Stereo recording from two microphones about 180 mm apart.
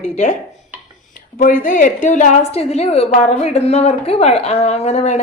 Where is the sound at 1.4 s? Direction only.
50° left (ahead or behind).